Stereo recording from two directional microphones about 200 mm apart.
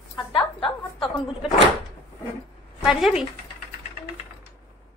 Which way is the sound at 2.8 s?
Centre (ahead or behind).